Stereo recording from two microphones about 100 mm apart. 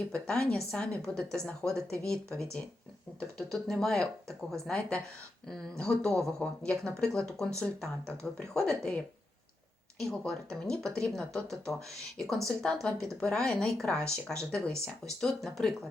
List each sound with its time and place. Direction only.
0.1 s a woman's voice: 10° left (ahead or behind)